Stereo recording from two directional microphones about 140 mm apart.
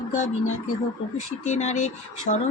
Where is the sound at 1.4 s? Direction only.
55° left (ahead or behind).